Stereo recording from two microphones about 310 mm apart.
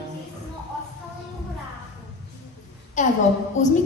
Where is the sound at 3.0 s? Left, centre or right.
Left.